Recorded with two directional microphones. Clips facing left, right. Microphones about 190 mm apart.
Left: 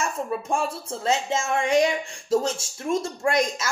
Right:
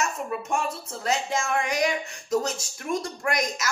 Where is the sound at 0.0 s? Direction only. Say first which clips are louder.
Left 2 dB; 30° left (ahead or behind).